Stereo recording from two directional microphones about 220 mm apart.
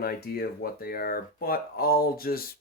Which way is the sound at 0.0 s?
45° left (ahead or behind).